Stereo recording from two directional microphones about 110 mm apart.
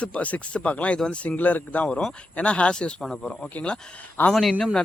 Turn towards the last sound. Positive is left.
turn(degrees=5)  # may be behind; listen again after turning